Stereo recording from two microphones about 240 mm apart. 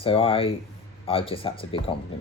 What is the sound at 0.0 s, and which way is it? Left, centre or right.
Speech, left.